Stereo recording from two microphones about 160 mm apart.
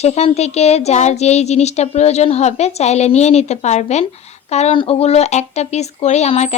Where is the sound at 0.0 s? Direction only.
40° left (ahead or behind).